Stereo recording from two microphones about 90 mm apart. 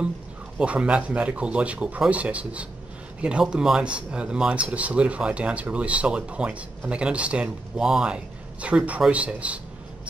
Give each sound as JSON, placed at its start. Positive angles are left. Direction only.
{"t": 0.6, "sound": "speech", "side_deg": -10}